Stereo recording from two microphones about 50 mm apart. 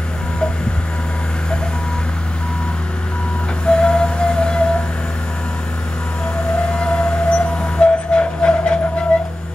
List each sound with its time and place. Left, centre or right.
3.6 s music: centre
6.7 s vehicle: centre
9.1 s a sound: centre